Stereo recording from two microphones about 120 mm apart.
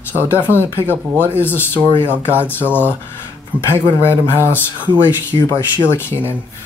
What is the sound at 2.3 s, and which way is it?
Speech, 15° left (ahead or behind).